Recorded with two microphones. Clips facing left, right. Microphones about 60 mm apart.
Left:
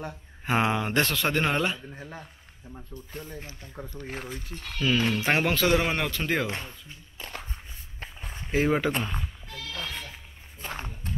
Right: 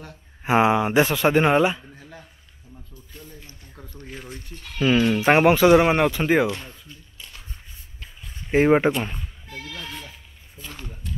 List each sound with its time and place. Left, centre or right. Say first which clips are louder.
0.5 s speech: right 7 dB; centre
2.0 s speech: left 3 dB; left
3.1 s speech: left 4 dB; left
4.5 s speech: left 1 dB; centre
4.7 s speech: right 6 dB; centre
7.2 s a sound: left 7 dB; left
8.5 s speech: right 7 dB; right
9.8 s sheep: left 3 dB; left
10.6 s speech: left 3 dB; left